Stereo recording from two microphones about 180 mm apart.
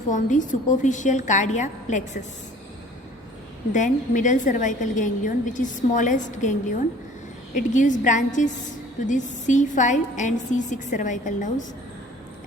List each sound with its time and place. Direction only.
0.1 s a woman's voice: 45° left (ahead or behind)
3.7 s a woman's voice: 45° left (ahead or behind)